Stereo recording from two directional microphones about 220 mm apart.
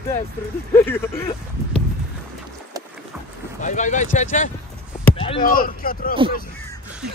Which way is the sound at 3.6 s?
35° left (ahead or behind).